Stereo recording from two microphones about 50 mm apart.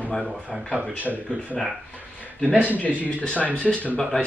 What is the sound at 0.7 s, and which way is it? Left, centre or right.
Speech, right.